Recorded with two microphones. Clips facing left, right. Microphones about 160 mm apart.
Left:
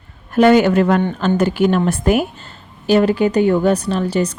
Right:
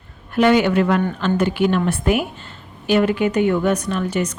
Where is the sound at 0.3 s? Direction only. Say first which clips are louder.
Left 4 dB; 40° left (ahead or behind).